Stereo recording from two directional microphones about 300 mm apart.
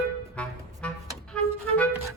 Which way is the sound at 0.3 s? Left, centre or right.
Centre.